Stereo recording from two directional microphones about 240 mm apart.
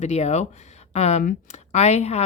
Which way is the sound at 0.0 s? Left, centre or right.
Left.